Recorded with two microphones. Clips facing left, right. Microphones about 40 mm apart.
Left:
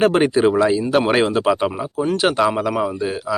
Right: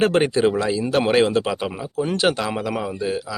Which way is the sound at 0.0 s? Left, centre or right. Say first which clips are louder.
Left 3 dB; centre.